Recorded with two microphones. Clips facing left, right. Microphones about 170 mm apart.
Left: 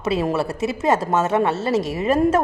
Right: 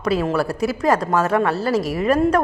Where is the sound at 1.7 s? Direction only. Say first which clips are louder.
Even; centre (ahead or behind).